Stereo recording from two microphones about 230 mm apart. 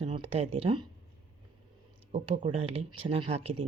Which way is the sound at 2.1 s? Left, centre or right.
Right.